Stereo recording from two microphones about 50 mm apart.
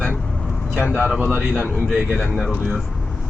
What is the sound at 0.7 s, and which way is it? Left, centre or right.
Speech, right.